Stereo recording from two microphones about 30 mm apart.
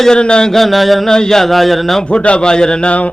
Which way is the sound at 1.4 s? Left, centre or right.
Centre.